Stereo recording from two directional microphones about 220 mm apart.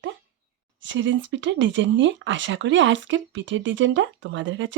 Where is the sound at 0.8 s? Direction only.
55° right (ahead or behind).